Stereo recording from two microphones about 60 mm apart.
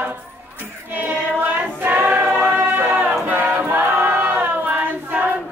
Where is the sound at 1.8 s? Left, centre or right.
Right.